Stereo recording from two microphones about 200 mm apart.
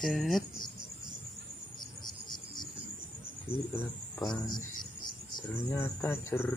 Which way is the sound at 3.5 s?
10° left (ahead or behind).